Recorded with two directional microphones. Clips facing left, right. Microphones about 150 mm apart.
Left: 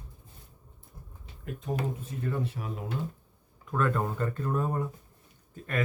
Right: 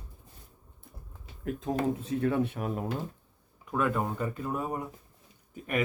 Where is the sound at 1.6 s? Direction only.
90° right; by 2.8 s 55° right (ahead or behind).